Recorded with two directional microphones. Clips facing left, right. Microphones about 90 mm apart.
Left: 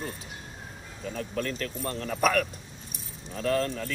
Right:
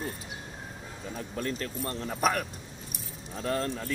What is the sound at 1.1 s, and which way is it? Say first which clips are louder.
Speech: left 2 dB; 20° right (ahead or behind).